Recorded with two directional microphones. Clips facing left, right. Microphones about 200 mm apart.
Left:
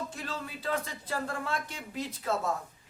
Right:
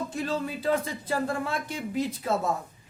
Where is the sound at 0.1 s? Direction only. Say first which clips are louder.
Right 9 dB; 15° right (ahead or behind).